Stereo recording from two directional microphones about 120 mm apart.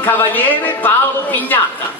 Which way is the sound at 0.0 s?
15° left (ahead or behind).